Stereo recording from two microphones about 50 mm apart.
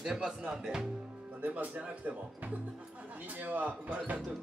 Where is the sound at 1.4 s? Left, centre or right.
Right.